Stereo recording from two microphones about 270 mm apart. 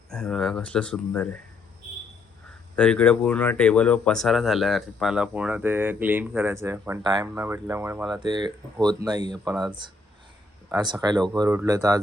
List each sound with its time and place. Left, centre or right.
0.1 s speech: centre
2.7 s speech: centre